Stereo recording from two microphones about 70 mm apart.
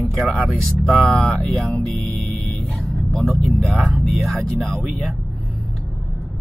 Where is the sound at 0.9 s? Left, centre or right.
Centre.